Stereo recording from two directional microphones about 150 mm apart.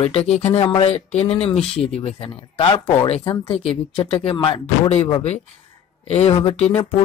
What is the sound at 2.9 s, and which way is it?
Speech, 40° left (ahead or behind).